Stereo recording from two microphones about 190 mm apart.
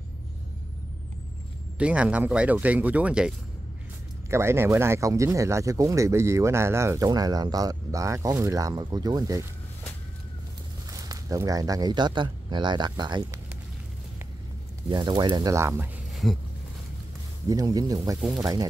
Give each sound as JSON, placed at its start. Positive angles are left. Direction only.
{"t": 1.8, "sound": "speech", "side_deg": -5}
{"t": 10.9, "sound": "speech", "side_deg": -20}
{"t": 14.9, "sound": "speech", "side_deg": -20}
{"t": 16.1, "sound": "a sound", "side_deg": 0}
{"t": 17.5, "sound": "speech", "side_deg": -20}